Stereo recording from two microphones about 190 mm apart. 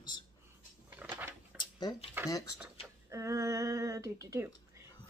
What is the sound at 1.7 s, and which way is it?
Speech, 20° left (ahead or behind).